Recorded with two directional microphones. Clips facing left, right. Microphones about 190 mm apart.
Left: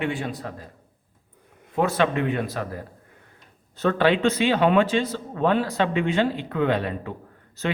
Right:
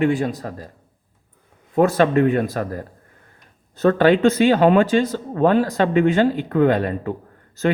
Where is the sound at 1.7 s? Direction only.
45° right (ahead or behind).